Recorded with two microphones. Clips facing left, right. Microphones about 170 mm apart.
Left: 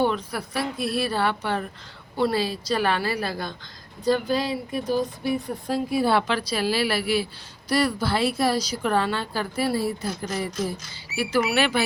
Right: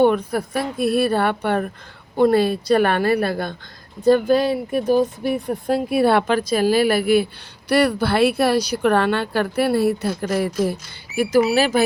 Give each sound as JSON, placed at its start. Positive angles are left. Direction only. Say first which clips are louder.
{"t": 0.0, "sound": "speech", "louder": "right 8 dB", "side_deg": -55}
{"t": 7.7, "sound": "speech", "louder": "right 5 dB", "side_deg": -65}
{"t": 11.2, "sound": "speech", "louder": "right 6 dB", "side_deg": -40}